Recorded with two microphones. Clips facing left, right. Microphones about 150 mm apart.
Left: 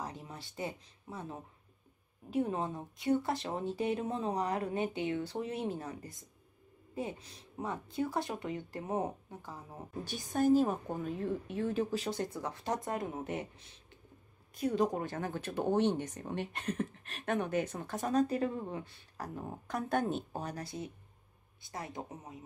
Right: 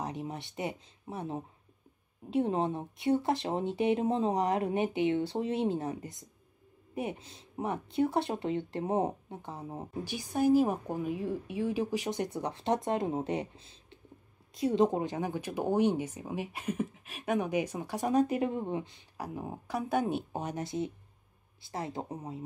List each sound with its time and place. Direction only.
0.0 s speech: 20° right (ahead or behind)
10.0 s speech: 10° right (ahead or behind); by 22.4 s 30° right (ahead or behind)